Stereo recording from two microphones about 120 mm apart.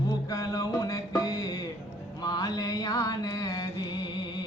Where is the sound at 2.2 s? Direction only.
30° left (ahead or behind).